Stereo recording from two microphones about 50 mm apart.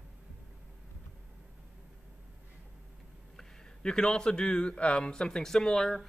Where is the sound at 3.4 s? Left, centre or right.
Centre.